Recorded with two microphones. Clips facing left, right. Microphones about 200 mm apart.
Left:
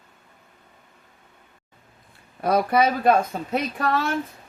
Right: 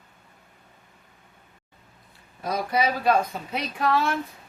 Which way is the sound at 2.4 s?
60° left (ahead or behind).